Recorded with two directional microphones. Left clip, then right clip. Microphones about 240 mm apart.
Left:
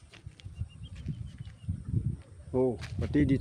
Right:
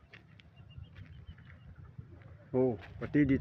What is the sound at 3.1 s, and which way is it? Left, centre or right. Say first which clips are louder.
Speech: left 1 dB; centre.